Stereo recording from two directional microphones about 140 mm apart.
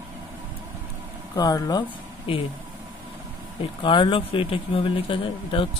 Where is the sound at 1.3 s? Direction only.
25° left (ahead or behind).